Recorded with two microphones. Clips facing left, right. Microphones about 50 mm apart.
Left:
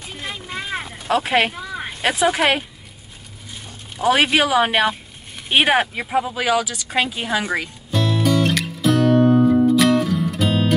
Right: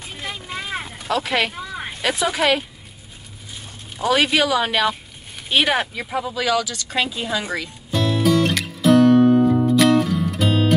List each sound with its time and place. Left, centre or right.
0.1 s a sound: centre
1.0 s speech: left
1.5 s a sound: centre
2.0 s speech: left
4.0 s speech: left
7.2 s a woman's voice: left
7.9 s music: centre